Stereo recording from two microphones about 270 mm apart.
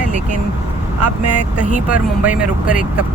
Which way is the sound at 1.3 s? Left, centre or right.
Left.